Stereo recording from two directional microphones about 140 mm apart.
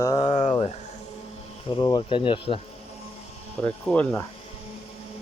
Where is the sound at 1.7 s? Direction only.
35° left (ahead or behind).